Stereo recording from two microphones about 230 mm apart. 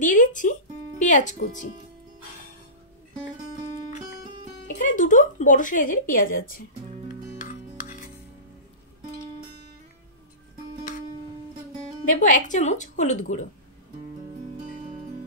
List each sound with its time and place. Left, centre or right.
0.0 s speech: left
4.6 s speech: left
12.0 s speech: left